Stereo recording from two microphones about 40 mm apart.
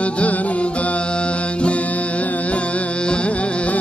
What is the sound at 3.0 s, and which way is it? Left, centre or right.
Music, left.